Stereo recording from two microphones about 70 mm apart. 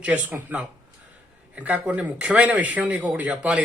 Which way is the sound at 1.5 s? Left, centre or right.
Right.